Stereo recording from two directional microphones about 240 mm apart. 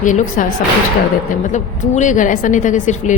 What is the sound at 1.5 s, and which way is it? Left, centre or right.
A woman's voice, left.